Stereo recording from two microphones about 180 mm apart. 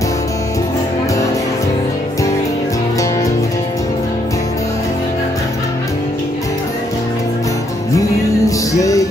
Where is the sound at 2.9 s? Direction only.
20° left (ahead or behind).